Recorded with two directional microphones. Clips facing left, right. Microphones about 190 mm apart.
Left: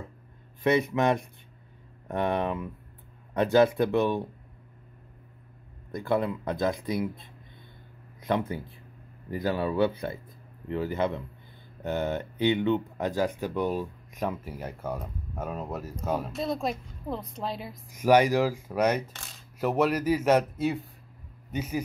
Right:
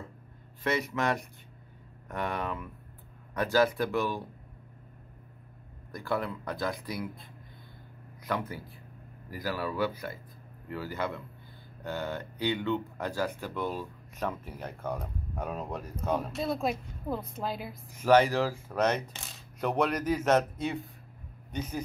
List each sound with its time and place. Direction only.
0.7 s speech: 20° left (ahead or behind)
5.9 s speech: 25° left (ahead or behind); by 17.7 s centre (ahead or behind)
17.9 s a man's voice: 10° left (ahead or behind)